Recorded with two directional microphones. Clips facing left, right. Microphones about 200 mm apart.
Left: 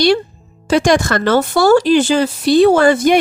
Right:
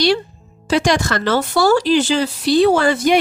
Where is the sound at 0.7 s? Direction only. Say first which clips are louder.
Left 4 dB; 50° left (ahead or behind).